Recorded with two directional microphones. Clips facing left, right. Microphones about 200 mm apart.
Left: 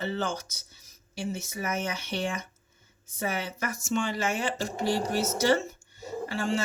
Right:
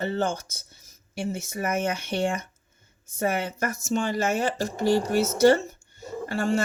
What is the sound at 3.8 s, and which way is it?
Speech, 40° right (ahead or behind).